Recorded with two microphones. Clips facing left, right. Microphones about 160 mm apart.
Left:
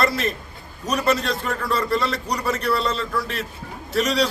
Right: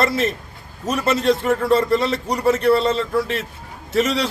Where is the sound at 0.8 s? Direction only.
25° right (ahead or behind).